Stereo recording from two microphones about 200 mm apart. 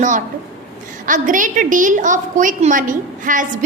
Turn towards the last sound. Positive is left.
turn(degrees=-40)  # may be behind; listen again after turning